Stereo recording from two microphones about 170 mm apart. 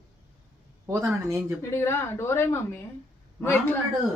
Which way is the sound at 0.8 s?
15° right (ahead or behind).